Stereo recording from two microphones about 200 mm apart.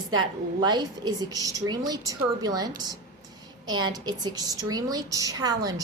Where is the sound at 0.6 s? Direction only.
20° right (ahead or behind).